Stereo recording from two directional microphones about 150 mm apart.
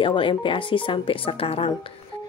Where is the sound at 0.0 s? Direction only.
35° left (ahead or behind).